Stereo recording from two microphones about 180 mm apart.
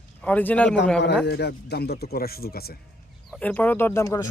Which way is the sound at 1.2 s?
65° left (ahead or behind).